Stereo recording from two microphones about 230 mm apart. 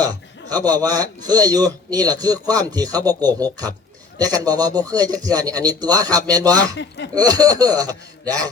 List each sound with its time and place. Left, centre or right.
0.0 s a sound: centre
1.3 s speech: centre
6.7 s speech: left
7.2 s speech: centre